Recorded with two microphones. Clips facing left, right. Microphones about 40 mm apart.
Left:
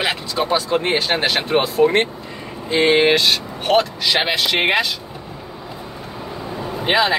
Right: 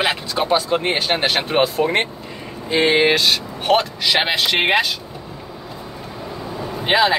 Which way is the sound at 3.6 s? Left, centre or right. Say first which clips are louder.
Even; centre.